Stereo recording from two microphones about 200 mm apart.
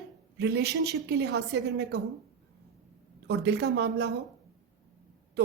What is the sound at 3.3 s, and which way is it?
Speech, 55° right (ahead or behind).